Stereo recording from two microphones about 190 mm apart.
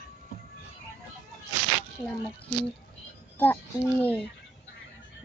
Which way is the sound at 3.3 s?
10° left (ahead or behind).